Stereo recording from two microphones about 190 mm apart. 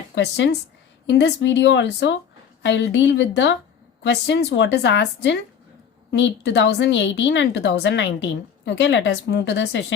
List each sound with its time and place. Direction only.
0.2 s a woman's voice: 65° left (ahead or behind)